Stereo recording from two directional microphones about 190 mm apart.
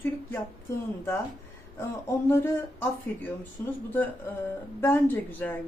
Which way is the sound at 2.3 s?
15° left (ahead or behind).